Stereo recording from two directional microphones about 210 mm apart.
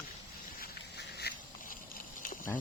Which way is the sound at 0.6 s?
50° left (ahead or behind).